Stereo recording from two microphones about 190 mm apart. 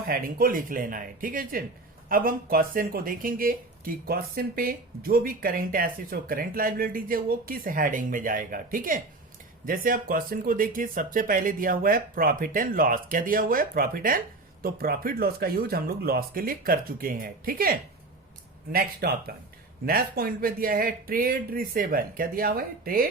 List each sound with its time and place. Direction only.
0.1 s speech: 50° right (ahead or behind)